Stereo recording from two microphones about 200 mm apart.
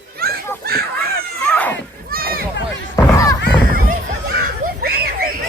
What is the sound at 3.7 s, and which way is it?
Children playing, 45° right (ahead or behind).